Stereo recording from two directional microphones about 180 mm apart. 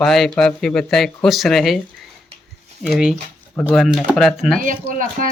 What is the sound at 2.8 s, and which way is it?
Speech, centre (ahead or behind).